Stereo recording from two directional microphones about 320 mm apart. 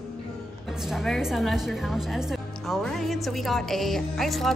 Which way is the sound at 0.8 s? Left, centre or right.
Centre.